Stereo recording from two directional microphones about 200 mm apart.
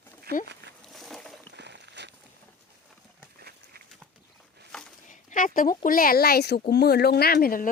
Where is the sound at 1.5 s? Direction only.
60° right (ahead or behind).